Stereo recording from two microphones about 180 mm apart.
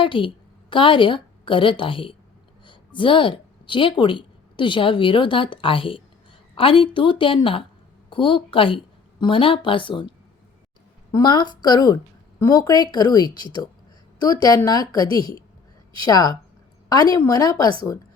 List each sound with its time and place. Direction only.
0.0 s a woman's voice: 25° left (ahead or behind)
11.1 s a woman's voice: 25° left (ahead or behind)